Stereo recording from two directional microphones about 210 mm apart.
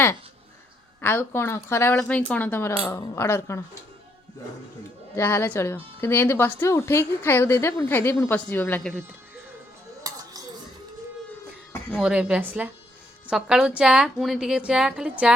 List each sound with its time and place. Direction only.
1.0 s speech: 10° left (ahead or behind)
5.1 s speech: 10° left (ahead or behind)
10.0 s dishes: 15° right (ahead or behind)
11.9 s a woman's voice: 5° right (ahead or behind)